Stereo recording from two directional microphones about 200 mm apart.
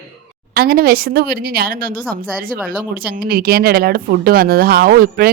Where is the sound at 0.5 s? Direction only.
50° right (ahead or behind).